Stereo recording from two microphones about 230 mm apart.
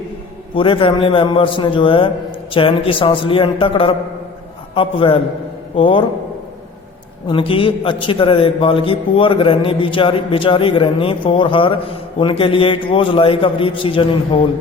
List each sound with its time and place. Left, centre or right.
0.5 s a man's voice: left
7.3 s a man's voice: left